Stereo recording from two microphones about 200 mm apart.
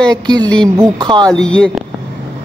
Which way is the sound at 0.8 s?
20° right (ahead or behind).